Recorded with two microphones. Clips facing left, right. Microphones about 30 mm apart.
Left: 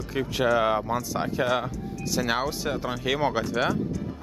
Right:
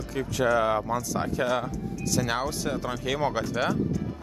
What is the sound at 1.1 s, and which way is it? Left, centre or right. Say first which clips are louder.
Speech: left 1 dB; centre.